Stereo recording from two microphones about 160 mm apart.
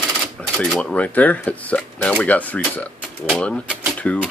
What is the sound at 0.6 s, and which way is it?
Speech, 5° left (ahead or behind).